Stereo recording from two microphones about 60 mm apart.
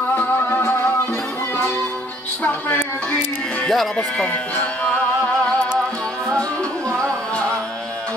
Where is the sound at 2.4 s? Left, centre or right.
Left.